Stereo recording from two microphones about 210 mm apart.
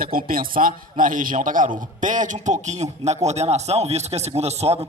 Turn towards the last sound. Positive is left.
turn(degrees=-30)  # may be behind; listen again after turning